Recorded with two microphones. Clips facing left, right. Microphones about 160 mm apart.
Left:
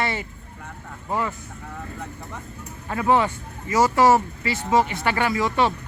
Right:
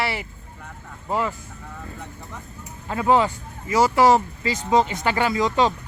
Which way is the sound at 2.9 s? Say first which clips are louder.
Right 1 dB; 20° right (ahead or behind).